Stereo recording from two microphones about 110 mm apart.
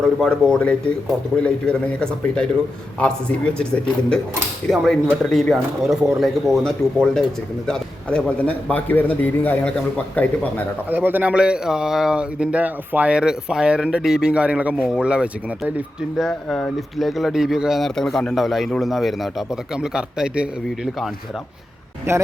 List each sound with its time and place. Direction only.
0.0 s a man's voice: 5° left (ahead or behind)
4.7 s a man's voice: centre (ahead or behind)
10.8 s speech: 15° right (ahead or behind)
16.1 s a man's voice: centre (ahead or behind)
22.1 s speech: 25° right (ahead or behind)